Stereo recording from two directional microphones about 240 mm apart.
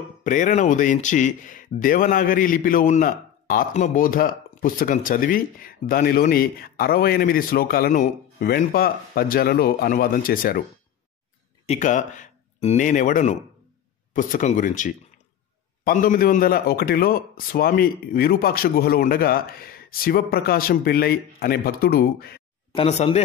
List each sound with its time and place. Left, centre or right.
0.2 s speech: left
11.6 s speech: left
22.8 s speech: left